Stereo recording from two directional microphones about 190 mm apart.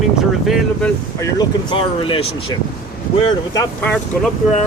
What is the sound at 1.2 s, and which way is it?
Speech, 25° left (ahead or behind).